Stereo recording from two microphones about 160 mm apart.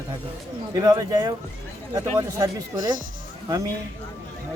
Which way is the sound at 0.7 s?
25° right (ahead or behind).